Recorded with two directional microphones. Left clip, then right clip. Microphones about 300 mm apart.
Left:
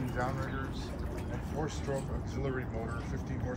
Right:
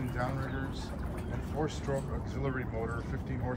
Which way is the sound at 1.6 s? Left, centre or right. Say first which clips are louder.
Right 2 dB; centre.